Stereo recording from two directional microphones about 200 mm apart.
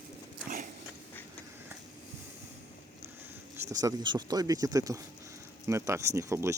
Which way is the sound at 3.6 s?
15° right (ahead or behind).